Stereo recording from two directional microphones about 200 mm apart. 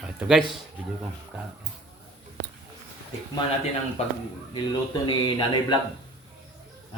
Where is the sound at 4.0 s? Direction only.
30° left (ahead or behind).